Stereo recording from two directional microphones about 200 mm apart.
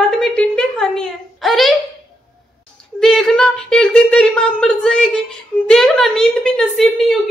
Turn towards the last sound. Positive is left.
turn(degrees=0)  # may be behind; listen again after turning